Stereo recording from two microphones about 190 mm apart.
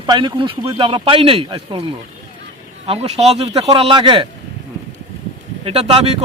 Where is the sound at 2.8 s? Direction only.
30° right (ahead or behind).